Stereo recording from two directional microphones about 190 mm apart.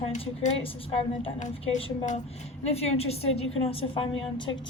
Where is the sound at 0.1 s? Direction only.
35° left (ahead or behind).